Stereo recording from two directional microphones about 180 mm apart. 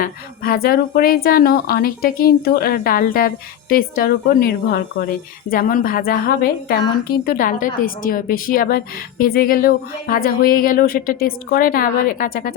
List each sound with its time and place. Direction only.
0.0 s a woman's voice: 55° left (ahead or behind)